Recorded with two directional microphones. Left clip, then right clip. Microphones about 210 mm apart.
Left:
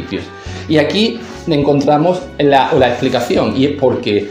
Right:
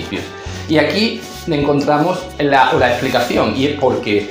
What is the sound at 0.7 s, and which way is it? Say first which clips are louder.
Speech: left 1 dB; 45° left (ahead or behind).